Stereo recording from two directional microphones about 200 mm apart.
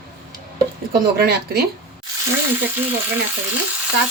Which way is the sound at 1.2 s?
50° right (ahead or behind).